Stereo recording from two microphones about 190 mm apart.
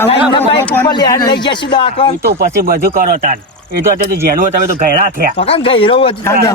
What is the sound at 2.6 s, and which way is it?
Speech, 50° right (ahead or behind).